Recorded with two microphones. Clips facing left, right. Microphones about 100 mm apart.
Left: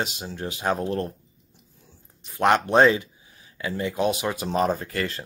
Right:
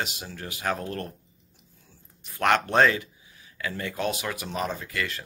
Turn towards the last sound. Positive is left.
turn(degrees=35)  # may be behind; listen again after turning